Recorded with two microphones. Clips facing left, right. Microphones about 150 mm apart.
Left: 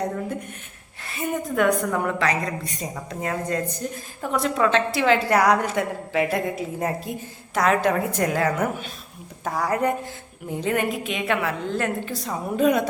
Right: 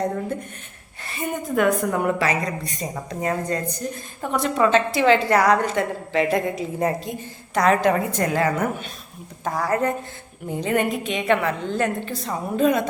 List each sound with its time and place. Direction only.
1.0 s a woman's voice: centre (ahead or behind)
10.5 s a woman's voice: centre (ahead or behind)